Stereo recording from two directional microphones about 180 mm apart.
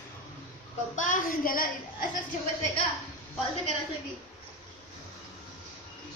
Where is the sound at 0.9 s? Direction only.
45° left (ahead or behind).